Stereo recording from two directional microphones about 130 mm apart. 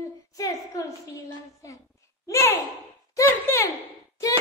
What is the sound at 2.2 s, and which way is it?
Child singing, 20° left (ahead or behind).